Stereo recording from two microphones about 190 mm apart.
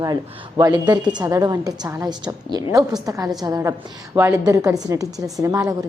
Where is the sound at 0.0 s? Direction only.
20° right (ahead or behind).